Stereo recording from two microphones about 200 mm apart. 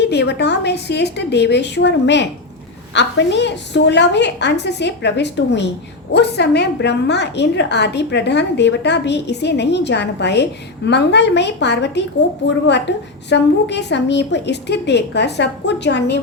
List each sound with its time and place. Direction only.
0.0 s a woman's voice: 55° left (ahead or behind)